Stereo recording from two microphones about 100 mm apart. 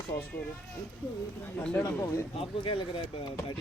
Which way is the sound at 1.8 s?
30° left (ahead or behind).